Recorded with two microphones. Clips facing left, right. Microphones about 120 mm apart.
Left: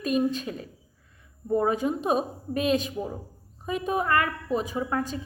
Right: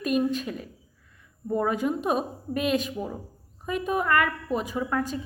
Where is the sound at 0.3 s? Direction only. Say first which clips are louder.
Right 1 dB; 30° left (ahead or behind).